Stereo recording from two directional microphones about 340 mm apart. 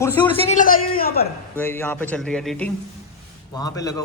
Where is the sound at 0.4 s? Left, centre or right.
Left.